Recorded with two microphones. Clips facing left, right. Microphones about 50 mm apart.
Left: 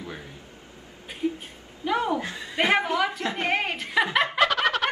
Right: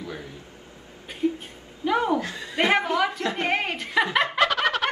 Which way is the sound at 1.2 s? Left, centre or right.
Centre.